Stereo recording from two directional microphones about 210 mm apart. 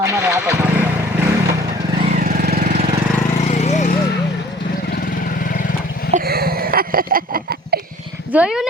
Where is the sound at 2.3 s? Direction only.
45° right (ahead or behind).